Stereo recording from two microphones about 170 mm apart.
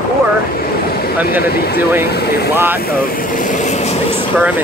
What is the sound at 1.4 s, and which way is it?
Speech, 65° left (ahead or behind).